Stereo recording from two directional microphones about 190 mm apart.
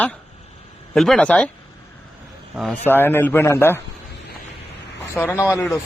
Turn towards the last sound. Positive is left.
turn(degrees=15)  # may be behind; listen again after turning